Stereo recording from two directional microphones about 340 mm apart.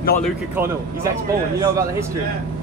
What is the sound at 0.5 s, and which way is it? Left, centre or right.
Speech, centre.